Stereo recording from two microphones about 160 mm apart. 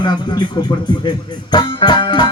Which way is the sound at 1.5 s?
30° left (ahead or behind).